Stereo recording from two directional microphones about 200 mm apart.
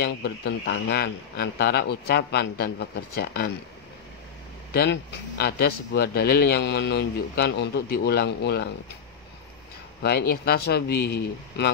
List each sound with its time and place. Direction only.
0.0 s speech: 55° left (ahead or behind)
5.4 s a man's voice: 55° left (ahead or behind)
10.0 s a man's voice: 55° left (ahead or behind)